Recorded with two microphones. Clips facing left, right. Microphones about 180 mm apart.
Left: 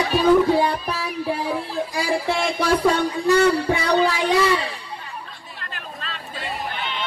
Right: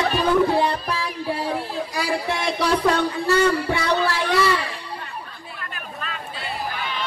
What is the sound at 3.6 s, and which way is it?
Speech, 15° left (ahead or behind).